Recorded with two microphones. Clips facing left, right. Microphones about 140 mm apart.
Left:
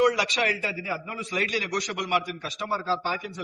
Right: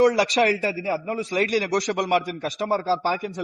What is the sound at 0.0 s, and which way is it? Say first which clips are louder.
A man's voice: right 5 dB; 35° right (ahead or behind).